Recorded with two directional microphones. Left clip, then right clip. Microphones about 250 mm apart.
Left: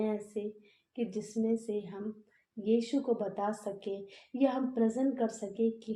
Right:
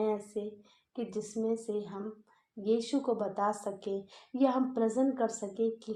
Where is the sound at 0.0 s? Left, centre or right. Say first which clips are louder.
Right 2 dB; right.